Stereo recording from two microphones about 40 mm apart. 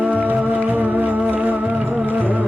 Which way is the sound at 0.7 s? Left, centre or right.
Right.